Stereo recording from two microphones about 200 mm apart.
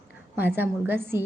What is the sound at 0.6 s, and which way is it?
Speech, 10° right (ahead or behind).